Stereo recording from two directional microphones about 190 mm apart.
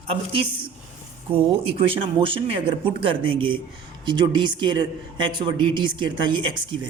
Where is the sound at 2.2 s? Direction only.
30° right (ahead or behind).